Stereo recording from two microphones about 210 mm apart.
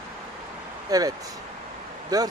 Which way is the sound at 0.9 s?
15° right (ahead or behind).